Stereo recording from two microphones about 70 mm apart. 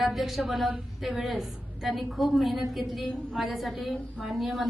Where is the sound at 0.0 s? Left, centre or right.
Centre.